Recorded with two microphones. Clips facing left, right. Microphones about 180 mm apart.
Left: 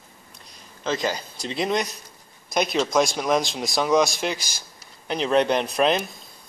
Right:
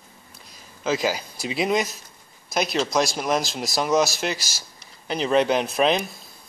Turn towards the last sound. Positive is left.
turn(degrees=0)  # may be behind; listen again after turning